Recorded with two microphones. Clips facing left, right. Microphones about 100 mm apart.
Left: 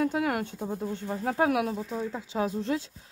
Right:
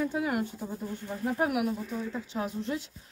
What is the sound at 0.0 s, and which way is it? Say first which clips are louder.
Speech: left 2 dB; 75° left (ahead or behind).